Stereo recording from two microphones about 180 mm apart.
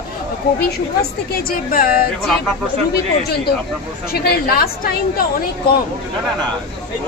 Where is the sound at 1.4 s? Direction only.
55° left (ahead or behind).